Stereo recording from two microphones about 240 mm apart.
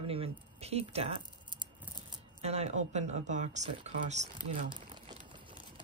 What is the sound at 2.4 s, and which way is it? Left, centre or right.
Speech, right.